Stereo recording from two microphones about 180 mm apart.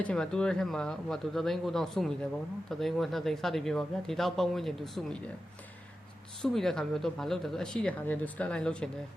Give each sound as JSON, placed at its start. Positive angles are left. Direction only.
{"t": 0.0, "sound": "speech", "side_deg": 5}
{"t": 6.4, "sound": "speech", "side_deg": 0}